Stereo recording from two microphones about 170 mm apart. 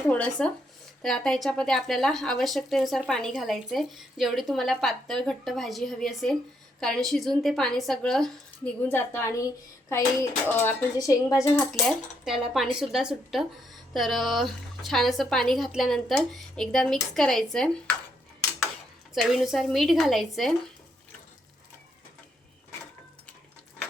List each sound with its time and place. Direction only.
0.1 s speech: 5° left (ahead or behind)
8.9 s speech: 15° left (ahead or behind)
11.7 s speech: centre (ahead or behind)
19.1 s speech: centre (ahead or behind)